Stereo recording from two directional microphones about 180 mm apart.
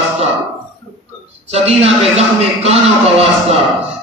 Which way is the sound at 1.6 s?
35° right (ahead or behind).